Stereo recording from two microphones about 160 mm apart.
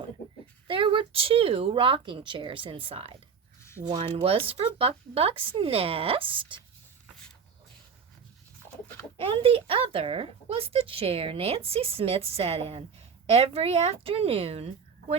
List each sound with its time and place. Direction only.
0.7 s a child's voice: 35° right (ahead or behind)
9.1 s a child's voice: 35° right (ahead or behind)